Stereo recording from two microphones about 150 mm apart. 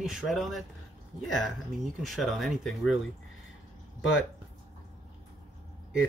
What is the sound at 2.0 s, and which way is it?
Speech, centre (ahead or behind).